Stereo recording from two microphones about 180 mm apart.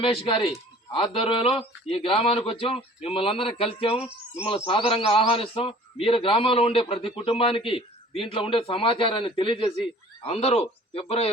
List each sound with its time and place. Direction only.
0.0 s a man's voice: 30° left (ahead or behind)